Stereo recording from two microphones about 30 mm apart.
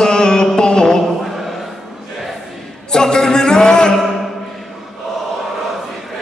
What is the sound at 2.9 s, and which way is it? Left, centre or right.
Music, left.